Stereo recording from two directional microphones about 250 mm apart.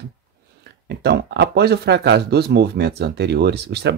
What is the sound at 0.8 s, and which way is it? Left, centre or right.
Speech, right.